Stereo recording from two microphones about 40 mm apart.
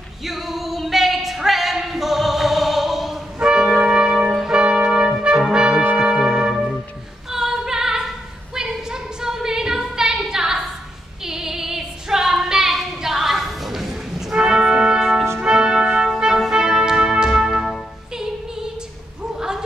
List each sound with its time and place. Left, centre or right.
0.2 s a sound: centre
3.3 s music: centre
3.8 s trumpet: right
4.7 s brass instrument: centre
5.9 s music: centre
7.2 s singing: centre
8.5 s a sound: centre
11.2 s female singing: centre
14.3 s organ: centre
15.0 s brass instrument: centre
15.4 s music: right
19.3 s a sound: centre